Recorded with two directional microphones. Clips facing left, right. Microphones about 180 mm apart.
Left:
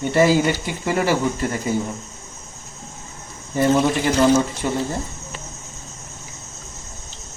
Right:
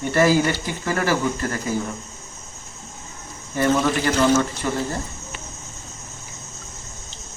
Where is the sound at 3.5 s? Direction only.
20° left (ahead or behind).